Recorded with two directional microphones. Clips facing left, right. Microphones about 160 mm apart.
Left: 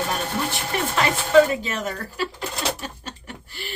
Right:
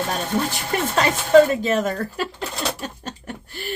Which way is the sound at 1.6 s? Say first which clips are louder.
Right 7 dB; 45° right (ahead or behind).